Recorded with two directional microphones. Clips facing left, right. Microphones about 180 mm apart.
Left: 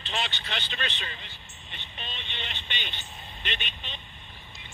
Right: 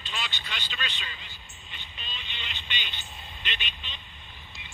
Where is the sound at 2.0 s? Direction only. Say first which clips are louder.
Left 4 dB; 55° left (ahead or behind).